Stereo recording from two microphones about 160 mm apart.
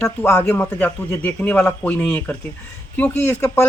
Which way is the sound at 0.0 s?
10° left (ahead or behind).